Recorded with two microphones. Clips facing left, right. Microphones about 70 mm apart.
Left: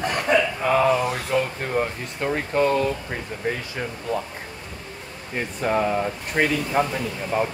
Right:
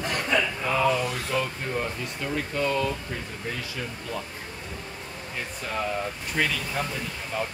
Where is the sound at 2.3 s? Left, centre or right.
Left.